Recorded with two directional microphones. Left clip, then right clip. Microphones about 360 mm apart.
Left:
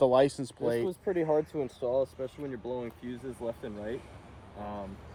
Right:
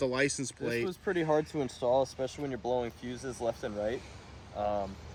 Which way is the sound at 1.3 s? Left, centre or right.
Right.